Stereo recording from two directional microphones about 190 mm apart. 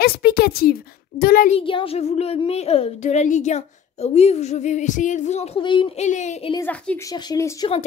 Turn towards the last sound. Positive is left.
turn(degrees=15)  # may be behind; listen again after turning